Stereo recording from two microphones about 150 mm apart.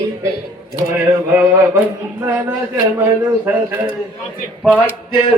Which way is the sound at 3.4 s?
10° right (ahead or behind).